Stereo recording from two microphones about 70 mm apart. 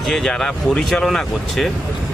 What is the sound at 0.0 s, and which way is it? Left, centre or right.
Speech, centre.